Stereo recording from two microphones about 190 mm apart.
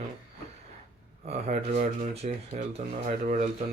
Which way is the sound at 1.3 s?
40° right (ahead or behind).